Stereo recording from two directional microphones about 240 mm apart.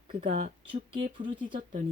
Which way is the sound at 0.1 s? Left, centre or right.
Right.